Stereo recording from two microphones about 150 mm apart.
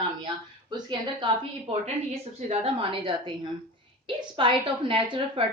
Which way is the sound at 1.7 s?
45° right (ahead or behind).